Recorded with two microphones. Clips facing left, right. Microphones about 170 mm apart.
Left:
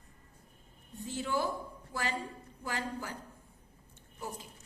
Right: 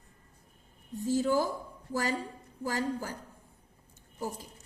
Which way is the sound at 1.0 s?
40° right (ahead or behind).